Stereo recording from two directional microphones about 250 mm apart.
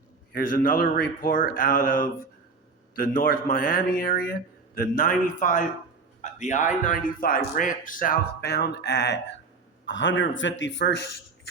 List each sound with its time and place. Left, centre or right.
0.3 s a man's voice: left